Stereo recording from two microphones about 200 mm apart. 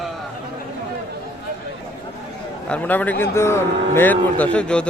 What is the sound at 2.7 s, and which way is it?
A man's voice, 10° left (ahead or behind).